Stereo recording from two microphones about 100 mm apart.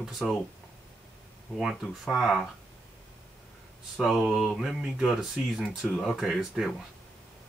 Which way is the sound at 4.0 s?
Centre (ahead or behind).